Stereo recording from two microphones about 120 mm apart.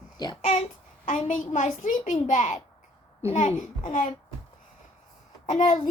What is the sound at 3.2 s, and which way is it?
Speech, 75° left (ahead or behind).